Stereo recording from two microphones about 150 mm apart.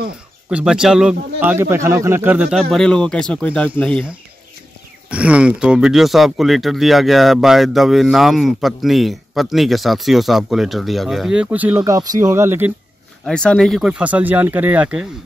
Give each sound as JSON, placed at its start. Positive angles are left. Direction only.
{"t": 0.5, "sound": "a man's voice", "side_deg": -5}
{"t": 2.7, "sound": "speech", "side_deg": 5}
{"t": 5.1, "sound": "speech", "side_deg": -10}
{"t": 11.8, "sound": "speech", "side_deg": -25}
{"t": 13.2, "sound": "a man's voice", "side_deg": 5}